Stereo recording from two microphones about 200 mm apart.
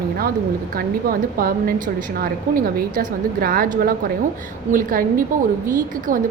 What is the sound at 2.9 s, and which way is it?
A woman's voice, 45° right (ahead or behind).